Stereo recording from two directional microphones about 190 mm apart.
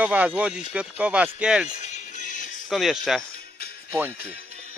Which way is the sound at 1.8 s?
40° left (ahead or behind).